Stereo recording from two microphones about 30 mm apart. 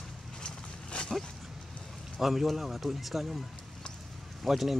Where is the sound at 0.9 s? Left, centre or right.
Left.